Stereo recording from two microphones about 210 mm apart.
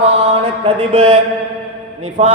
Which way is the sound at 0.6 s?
25° right (ahead or behind).